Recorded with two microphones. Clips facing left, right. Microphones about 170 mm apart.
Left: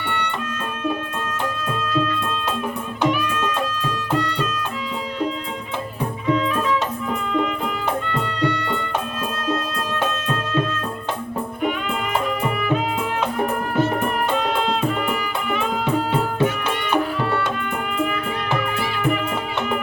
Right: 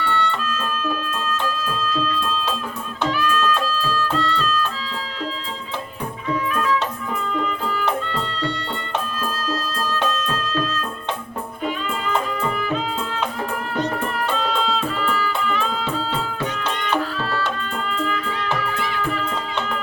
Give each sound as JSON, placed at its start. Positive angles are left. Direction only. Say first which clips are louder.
{"t": 0.0, "sound": "music", "louder": "right 3 dB", "side_deg": 20}
{"t": 6.2, "sound": "music", "louder": "left 2 dB", "side_deg": 25}
{"t": 9.5, "sound": "music", "louder": "left 3 dB", "side_deg": 20}
{"t": 13.9, "sound": "music", "louder": "left 3 dB", "side_deg": 15}